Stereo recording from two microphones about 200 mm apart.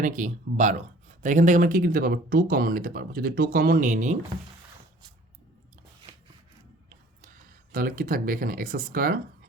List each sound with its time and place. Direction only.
0.0 s speech: 40° right (ahead or behind)
7.7 s speech: 45° right (ahead or behind)